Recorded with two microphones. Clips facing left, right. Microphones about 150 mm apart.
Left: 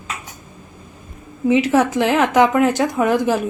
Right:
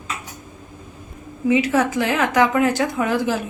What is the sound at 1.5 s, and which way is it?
Speech, 20° left (ahead or behind).